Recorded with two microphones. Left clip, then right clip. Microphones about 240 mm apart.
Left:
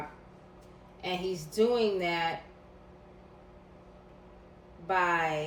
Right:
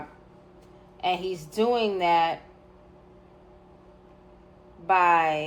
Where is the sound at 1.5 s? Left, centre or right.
Right.